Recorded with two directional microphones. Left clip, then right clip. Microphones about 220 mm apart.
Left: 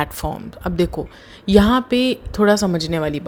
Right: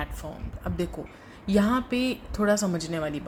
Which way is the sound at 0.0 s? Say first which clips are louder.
Left 13 dB; 45° left (ahead or behind).